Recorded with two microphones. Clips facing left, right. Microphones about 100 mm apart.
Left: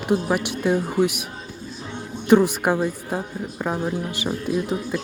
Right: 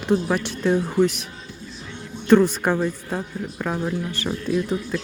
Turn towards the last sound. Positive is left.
turn(degrees=15)  # may be behind; listen again after turning